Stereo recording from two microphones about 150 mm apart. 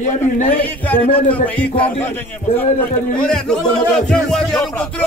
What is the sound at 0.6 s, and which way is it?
A man's voice, 10° left (ahead or behind).